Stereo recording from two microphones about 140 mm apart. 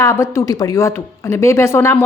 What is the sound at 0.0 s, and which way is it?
A woman's voice, 20° left (ahead or behind).